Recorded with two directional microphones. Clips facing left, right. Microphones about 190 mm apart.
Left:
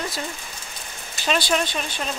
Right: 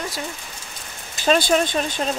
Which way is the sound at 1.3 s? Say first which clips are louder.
Right 5 dB; 45° right (ahead or behind).